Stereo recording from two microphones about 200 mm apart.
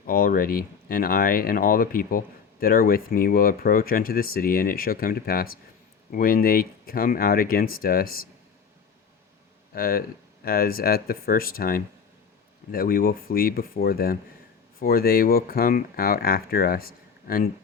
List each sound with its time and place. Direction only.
0.0 s speech: 45° left (ahead or behind)
9.7 s speech: 50° left (ahead or behind)